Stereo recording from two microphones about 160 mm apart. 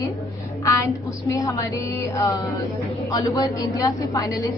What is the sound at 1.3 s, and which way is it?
A woman's voice, 20° left (ahead or behind).